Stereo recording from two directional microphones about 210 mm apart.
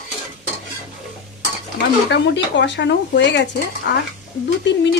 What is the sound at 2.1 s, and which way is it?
Speech, 55° left (ahead or behind).